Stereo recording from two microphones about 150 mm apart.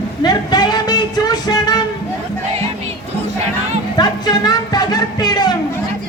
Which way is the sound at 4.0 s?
25° left (ahead or behind).